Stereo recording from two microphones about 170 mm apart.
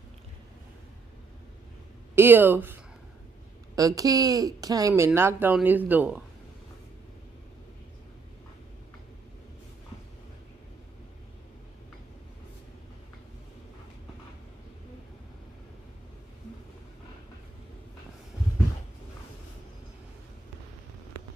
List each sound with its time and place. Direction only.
2.1 s speech: 10° right (ahead or behind)